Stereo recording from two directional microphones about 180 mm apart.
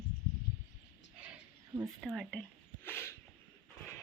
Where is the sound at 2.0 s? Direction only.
Centre (ahead or behind).